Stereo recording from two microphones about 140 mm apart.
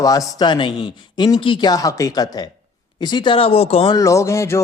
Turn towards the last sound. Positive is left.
turn(degrees=20)  # may be behind; listen again after turning